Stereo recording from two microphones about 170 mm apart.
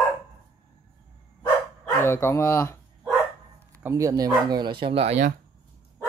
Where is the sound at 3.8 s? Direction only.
15° right (ahead or behind); by 5.3 s 40° right (ahead or behind).